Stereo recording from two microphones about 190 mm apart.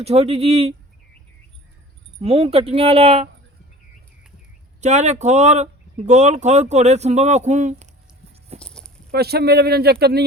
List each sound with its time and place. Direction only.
0.0 s speech: 30° right (ahead or behind)
2.1 s speech: 30° right (ahead or behind)
4.8 s speech: 35° right (ahead or behind)
8.5 s a sound: 5° left (ahead or behind)
9.1 s speech: 55° right (ahead or behind)